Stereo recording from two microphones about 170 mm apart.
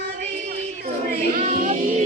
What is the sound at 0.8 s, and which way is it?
Child singing, 55° right (ahead or behind).